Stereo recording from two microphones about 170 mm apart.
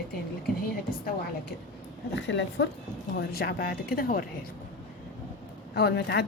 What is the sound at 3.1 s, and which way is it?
Speech, 70° left (ahead or behind).